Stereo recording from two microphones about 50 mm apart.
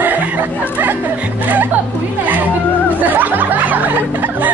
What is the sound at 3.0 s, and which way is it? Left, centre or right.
Chatter, right.